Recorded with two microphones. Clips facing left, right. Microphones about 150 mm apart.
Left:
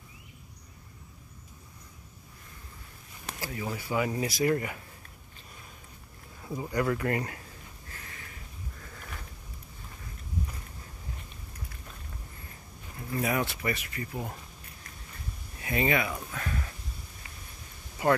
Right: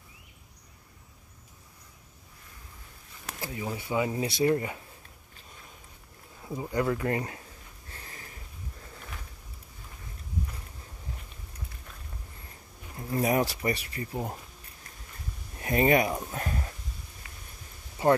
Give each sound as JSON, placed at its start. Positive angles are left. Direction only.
{"t": 3.3, "sound": "speech", "side_deg": -20}
{"t": 6.4, "sound": "speech", "side_deg": -10}
{"t": 6.8, "sound": "speech", "side_deg": -20}
{"t": 7.9, "sound": "a sound", "side_deg": -30}
{"t": 13.1, "sound": "speech", "side_deg": -35}
{"t": 15.6, "sound": "speech", "side_deg": -40}
{"t": 18.0, "sound": "speech", "side_deg": -25}